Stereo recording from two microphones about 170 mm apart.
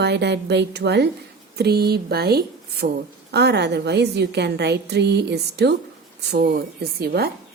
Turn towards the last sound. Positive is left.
turn(degrees=-65)  # may be behind; listen again after turning